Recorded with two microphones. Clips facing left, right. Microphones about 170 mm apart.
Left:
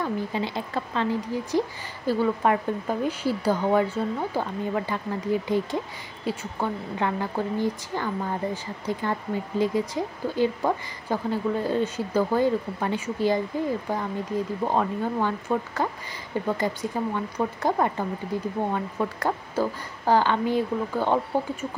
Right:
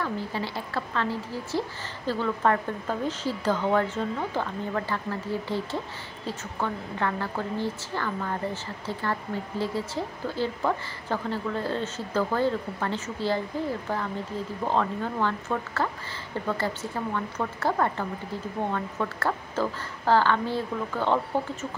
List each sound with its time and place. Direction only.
0.0 s speech: 20° left (ahead or behind)
14.6 s speech: 15° left (ahead or behind)